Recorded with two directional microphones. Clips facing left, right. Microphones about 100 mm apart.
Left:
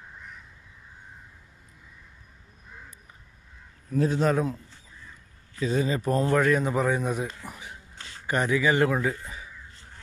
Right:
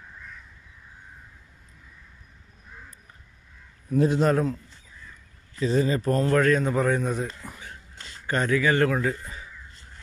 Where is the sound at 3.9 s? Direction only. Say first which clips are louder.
Right 3 dB; 5° right (ahead or behind).